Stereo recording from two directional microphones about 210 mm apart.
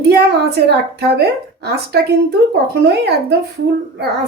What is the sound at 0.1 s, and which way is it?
A woman's voice, 50° right (ahead or behind).